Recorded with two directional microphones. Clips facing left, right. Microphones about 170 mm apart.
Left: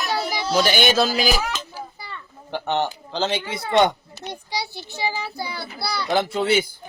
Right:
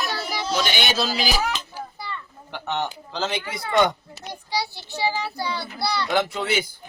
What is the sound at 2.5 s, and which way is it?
Speech, 30° left (ahead or behind).